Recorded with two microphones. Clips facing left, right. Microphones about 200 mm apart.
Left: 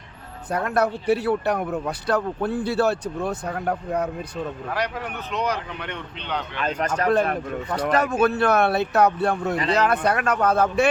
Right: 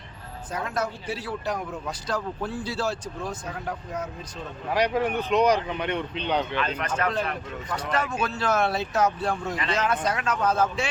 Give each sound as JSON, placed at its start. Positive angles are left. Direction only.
{"t": 0.5, "sound": "speech", "side_deg": 60}
{"t": 4.7, "sound": "speech", "side_deg": -15}
{"t": 6.6, "sound": "speech", "side_deg": 45}